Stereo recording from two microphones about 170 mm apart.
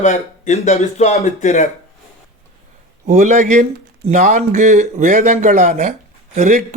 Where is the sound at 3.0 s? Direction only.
45° right (ahead or behind).